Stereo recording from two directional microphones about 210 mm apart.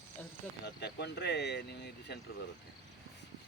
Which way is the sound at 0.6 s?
50° left (ahead or behind).